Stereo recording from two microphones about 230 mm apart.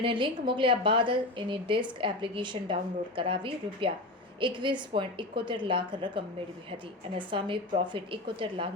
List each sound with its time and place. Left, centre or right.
0.0 s a woman's voice: right